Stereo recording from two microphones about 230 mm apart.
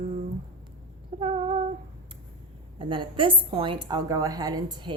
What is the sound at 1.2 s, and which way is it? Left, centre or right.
Speech, right.